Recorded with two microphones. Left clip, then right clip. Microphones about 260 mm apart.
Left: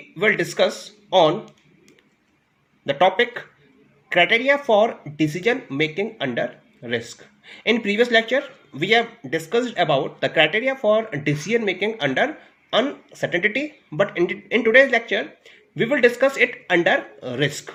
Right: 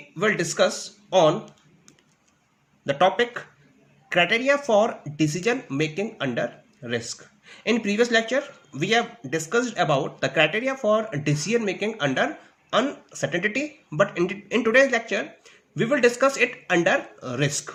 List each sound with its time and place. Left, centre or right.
0.2 s speech: centre
2.8 s speech: centre